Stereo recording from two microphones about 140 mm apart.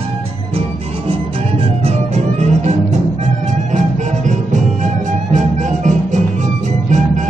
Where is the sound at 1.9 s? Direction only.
50° right (ahead or behind).